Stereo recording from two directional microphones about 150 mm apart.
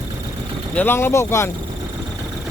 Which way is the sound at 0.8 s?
15° left (ahead or behind).